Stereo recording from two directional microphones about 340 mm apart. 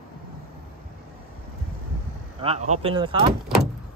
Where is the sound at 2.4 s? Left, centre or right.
Centre.